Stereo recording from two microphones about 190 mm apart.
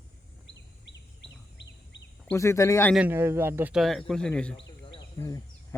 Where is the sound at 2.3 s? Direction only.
15° left (ahead or behind).